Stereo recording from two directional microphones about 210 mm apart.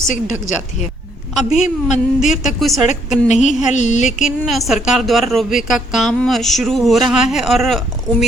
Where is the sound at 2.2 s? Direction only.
Centre (ahead or behind).